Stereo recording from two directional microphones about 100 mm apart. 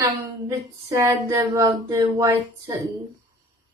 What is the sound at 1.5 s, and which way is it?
Speech, 40° right (ahead or behind).